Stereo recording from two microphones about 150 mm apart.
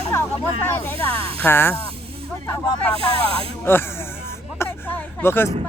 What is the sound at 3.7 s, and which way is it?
Speech, 15° left (ahead or behind).